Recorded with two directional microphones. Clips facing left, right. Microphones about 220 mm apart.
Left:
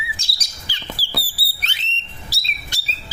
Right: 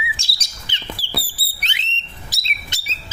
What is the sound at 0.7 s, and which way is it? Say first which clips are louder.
Bird: right 1 dB; 20° right (ahead or behind).